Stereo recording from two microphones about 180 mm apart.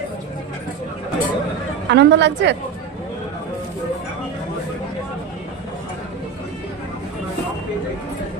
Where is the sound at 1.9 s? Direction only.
75° right (ahead or behind).